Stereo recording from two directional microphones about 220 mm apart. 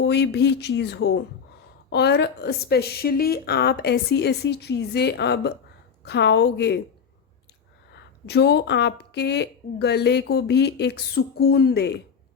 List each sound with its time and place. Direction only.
0.0 s speech: 50° left (ahead or behind)
7.9 s speech: 50° left (ahead or behind)